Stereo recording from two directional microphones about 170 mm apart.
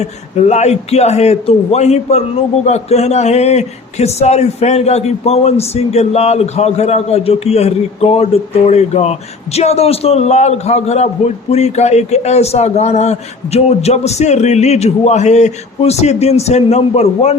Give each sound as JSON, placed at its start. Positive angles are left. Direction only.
{"t": 0.0, "sound": "speech", "side_deg": 40}